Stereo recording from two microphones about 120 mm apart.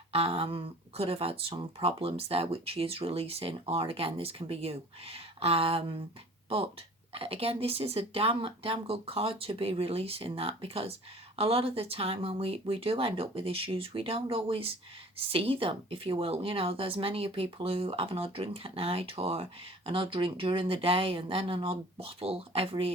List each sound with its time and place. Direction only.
0.1 s speech: 55° right (ahead or behind)
7.1 s speech: 55° right (ahead or behind)